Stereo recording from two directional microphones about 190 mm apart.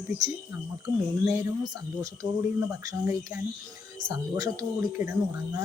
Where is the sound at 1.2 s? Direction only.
20° right (ahead or behind).